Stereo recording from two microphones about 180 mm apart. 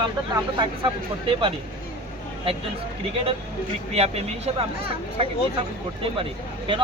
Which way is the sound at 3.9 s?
35° right (ahead or behind).